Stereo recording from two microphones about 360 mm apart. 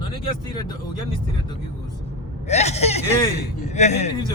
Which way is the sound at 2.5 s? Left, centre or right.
Centre.